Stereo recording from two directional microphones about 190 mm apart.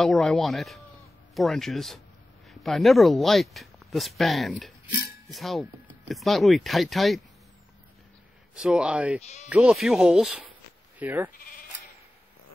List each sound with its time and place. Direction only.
0.0 s speech: centre (ahead or behind)
8.5 s speech: 5° right (ahead or behind)
9.2 s speech: 35° left (ahead or behind)
9.5 s speech: 5° right (ahead or behind)